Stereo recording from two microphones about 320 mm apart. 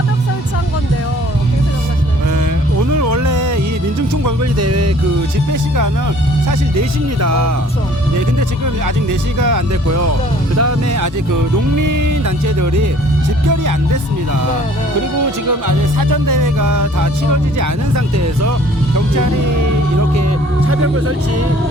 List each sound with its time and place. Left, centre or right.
2.9 s a sound: right
4.6 s music: right
6.5 s speech: right
9.4 s speech: right
15.4 s music: right
20.7 s speech: right